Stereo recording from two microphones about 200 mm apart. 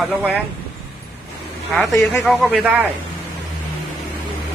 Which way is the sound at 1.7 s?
5° left (ahead or behind).